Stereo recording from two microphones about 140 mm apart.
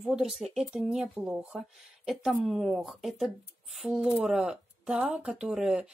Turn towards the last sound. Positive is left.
turn(degrees=-5)  # may be behind; listen again after turning